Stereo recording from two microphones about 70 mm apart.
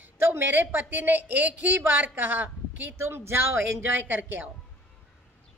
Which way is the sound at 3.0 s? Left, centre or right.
Right.